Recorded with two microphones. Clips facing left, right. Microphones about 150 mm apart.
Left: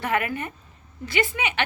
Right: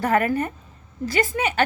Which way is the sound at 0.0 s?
40° right (ahead or behind).